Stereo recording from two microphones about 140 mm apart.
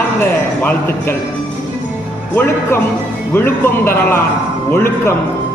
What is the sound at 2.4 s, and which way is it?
A man's voice, 15° left (ahead or behind).